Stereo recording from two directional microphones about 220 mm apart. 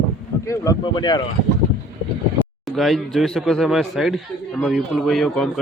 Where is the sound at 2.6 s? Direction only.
Centre (ahead or behind).